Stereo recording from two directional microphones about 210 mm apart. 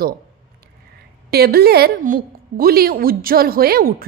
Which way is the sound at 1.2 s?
50° right (ahead or behind).